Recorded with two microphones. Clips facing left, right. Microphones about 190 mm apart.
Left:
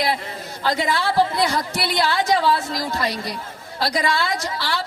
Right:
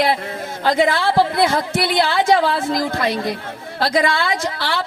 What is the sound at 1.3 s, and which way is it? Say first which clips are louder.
A woman's voice: right 4 dB; 55° right (ahead or behind).